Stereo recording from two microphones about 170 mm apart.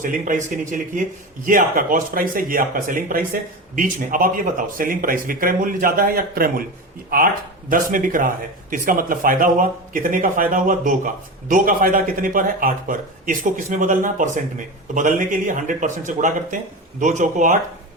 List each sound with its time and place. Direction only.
0.0 s speech: 50° right (ahead or behind)
7.7 s speech: 55° right (ahead or behind)